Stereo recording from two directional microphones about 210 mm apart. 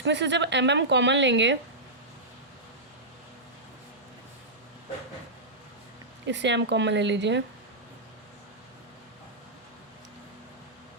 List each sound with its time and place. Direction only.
0.0 s a woman's voice: 60° right (ahead or behind)
6.2 s a woman's voice: 60° right (ahead or behind)